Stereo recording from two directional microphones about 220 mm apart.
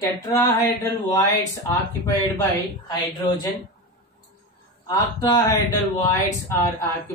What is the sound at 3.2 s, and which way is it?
Speech, 20° left (ahead or behind).